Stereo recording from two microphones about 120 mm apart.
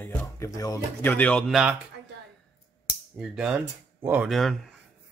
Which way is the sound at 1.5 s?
5° right (ahead or behind).